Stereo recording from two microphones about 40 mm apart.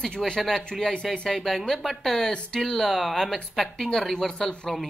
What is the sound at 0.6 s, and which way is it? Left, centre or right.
Speech, centre.